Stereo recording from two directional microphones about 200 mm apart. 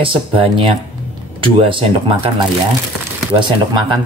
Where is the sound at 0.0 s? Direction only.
25° right (ahead or behind).